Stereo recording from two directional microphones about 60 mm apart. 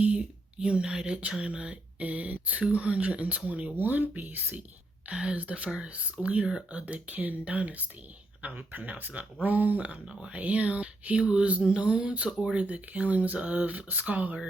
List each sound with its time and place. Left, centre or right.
0.6 s speech: centre; by 4.6 s right
5.1 s speech: centre
10.1 s speech: centre
10.3 s speech: right